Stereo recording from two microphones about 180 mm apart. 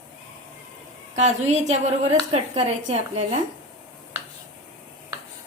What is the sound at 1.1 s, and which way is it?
A woman's voice, 40° right (ahead or behind).